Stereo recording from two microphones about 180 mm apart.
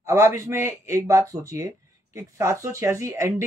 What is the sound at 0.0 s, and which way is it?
A man's voice, 15° right (ahead or behind).